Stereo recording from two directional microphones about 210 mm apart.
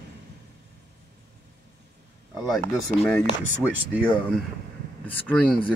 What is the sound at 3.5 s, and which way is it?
Speech, 5° right (ahead or behind).